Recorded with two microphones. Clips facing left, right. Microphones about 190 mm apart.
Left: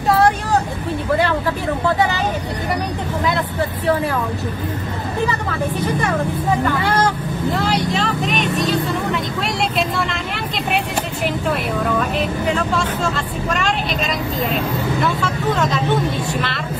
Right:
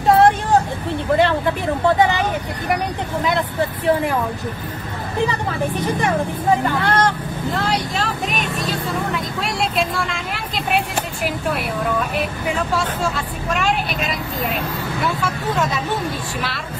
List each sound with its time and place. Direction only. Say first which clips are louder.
0.1 s vehicle: right 2 dB; 20° right (ahead or behind)
5.2 s speech: right 1 dB; 20° right (ahead or behind)
6.8 s speech: even; 5° left (ahead or behind)
9.8 s speech: left 1 dB; centre (ahead or behind)
12.4 s speech: left 2 dB; 5° right (ahead or behind)